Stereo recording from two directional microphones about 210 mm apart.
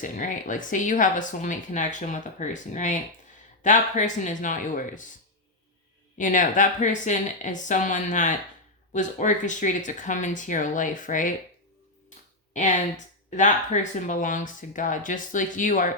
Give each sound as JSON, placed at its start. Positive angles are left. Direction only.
{"t": 0.0, "sound": "speech", "side_deg": 40}
{"t": 6.1, "sound": "speech", "side_deg": 40}
{"t": 13.9, "sound": "speech", "side_deg": 35}